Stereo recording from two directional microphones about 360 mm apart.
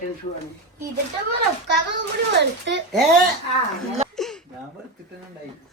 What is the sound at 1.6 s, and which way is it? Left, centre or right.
A child's voice, right.